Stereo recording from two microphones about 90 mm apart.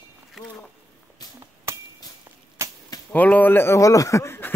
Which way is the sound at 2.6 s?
30° right (ahead or behind).